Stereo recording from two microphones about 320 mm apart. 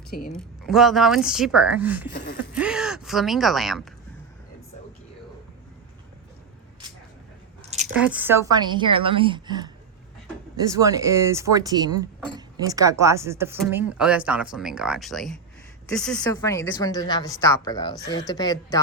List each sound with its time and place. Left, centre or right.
0.1 s speech: left
0.7 s speech: centre
7.7 s squish: right
7.9 s a woman's voice: centre